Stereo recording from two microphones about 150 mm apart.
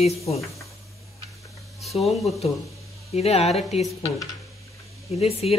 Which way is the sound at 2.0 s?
Centre (ahead or behind).